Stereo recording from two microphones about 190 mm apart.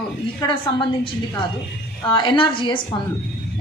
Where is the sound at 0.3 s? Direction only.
25° left (ahead or behind).